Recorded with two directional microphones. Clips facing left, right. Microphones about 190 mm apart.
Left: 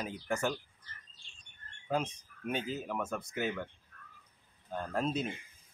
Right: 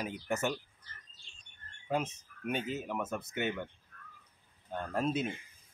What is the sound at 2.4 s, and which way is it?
Speech, 5° right (ahead or behind).